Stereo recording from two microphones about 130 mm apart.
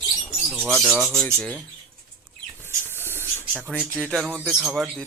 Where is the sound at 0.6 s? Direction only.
5° left (ahead or behind).